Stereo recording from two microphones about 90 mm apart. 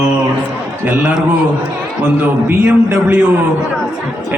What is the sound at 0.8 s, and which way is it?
Speech, 15° right (ahead or behind).